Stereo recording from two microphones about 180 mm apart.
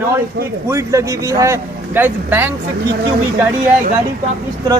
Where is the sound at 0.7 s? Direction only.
15° right (ahead or behind).